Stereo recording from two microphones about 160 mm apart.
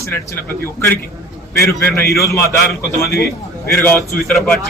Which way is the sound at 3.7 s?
15° left (ahead or behind).